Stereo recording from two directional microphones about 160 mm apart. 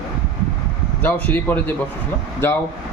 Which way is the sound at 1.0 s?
10° left (ahead or behind).